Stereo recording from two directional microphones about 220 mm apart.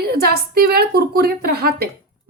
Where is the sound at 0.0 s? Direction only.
45° right (ahead or behind).